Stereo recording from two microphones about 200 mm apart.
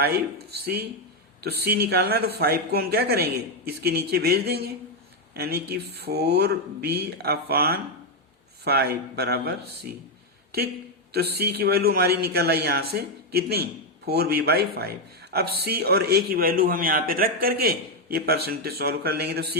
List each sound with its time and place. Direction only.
0.6 s a man's voice: 50° right (ahead or behind)
11.1 s a man's voice: 50° right (ahead or behind)